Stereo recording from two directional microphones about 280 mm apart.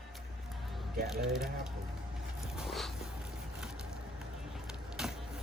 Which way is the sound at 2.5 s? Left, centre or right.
Centre.